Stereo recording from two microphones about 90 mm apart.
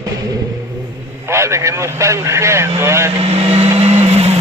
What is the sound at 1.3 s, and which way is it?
Vehicle, 30° right (ahead or behind).